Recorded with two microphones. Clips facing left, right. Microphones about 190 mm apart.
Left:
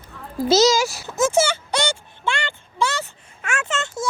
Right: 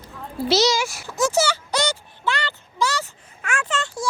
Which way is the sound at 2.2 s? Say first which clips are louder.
Even; 25° left (ahead or behind).